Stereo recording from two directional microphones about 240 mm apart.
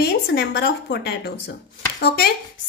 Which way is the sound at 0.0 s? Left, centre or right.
Left.